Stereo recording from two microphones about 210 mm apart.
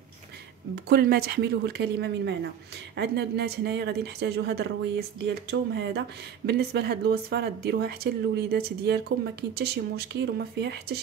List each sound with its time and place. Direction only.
0.7 s a woman's voice: 50° right (ahead or behind)